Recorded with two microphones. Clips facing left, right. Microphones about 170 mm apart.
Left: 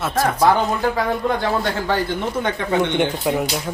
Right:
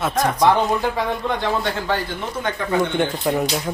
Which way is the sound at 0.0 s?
5° left (ahead or behind).